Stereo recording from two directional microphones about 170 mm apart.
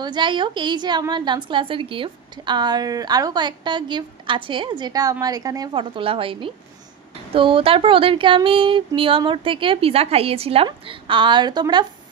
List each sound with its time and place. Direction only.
0.0 s a woman's voice: 30° right (ahead or behind)